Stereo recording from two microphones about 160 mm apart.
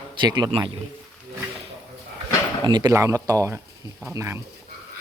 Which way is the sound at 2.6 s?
25° right (ahead or behind).